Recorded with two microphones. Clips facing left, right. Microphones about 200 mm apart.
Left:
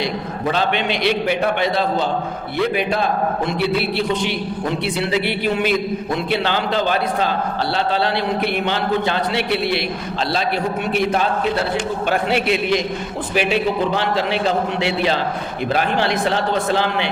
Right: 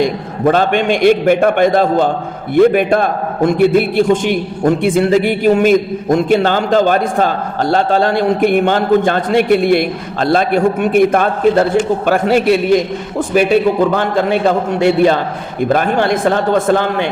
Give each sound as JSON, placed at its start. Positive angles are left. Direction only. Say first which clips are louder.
{"t": 0.0, "sound": "a man's voice", "louder": "right 8 dB", "side_deg": -50}